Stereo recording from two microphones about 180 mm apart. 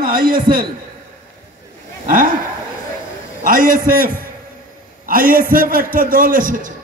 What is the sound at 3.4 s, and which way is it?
A man's voice, 50° right (ahead or behind).